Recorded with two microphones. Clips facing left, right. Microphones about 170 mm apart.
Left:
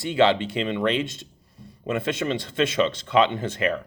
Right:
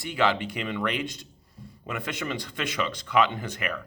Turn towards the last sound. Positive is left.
turn(degrees=25)  # may be behind; listen again after turning